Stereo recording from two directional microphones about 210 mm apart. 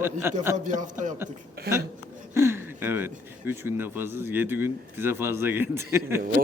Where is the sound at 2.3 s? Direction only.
10° right (ahead or behind).